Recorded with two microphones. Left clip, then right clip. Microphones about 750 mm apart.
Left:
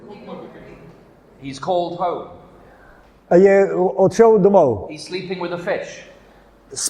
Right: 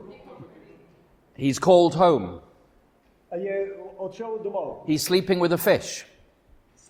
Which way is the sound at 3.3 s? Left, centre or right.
Left.